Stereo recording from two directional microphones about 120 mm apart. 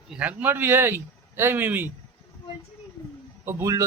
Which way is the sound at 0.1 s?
10° right (ahead or behind).